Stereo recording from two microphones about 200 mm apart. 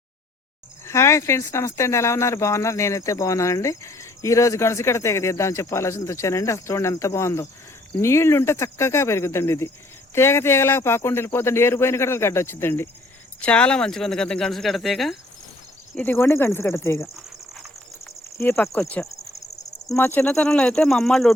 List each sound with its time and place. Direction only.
0.9 s speech: 15° left (ahead or behind)
16.0 s speech: 10° left (ahead or behind)
18.3 s speech: 10° left (ahead or behind)